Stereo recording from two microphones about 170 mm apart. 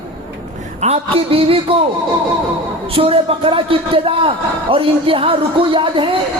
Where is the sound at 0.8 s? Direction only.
35° right (ahead or behind).